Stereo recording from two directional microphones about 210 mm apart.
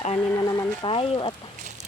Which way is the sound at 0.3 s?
15° left (ahead or behind).